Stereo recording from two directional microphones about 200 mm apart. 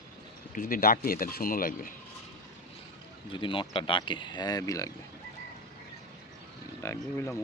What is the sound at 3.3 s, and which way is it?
Speech, 25° left (ahead or behind).